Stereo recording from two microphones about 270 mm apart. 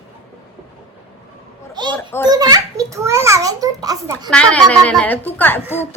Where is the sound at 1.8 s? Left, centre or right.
Centre.